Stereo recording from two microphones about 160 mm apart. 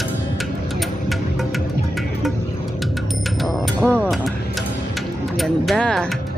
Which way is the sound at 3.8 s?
15° right (ahead or behind).